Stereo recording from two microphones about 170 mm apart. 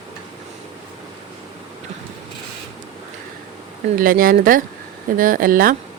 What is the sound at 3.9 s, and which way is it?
A woman's voice, 55° right (ahead or behind).